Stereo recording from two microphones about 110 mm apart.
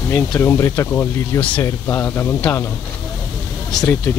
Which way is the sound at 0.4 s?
25° left (ahead or behind).